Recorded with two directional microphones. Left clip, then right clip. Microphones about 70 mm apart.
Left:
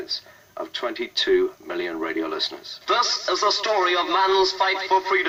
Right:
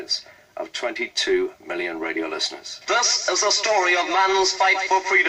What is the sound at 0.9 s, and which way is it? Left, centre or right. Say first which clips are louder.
Speech: left 2 dB; right.